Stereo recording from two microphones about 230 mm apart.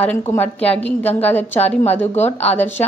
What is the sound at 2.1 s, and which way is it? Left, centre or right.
Speech, left.